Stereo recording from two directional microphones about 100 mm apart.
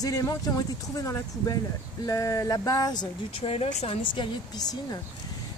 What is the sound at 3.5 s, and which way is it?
Speech, 75° left (ahead or behind).